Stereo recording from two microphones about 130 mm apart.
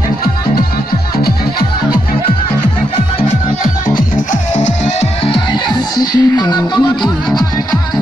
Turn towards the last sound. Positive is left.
turn(degrees=35)  # may be behind; listen again after turning